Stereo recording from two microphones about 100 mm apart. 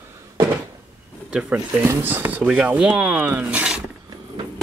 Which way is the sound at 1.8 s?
20° right (ahead or behind).